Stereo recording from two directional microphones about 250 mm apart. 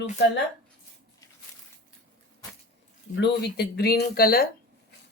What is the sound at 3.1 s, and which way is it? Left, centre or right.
Speech, left.